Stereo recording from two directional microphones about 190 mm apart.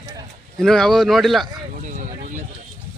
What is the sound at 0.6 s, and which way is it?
Speech, centre (ahead or behind).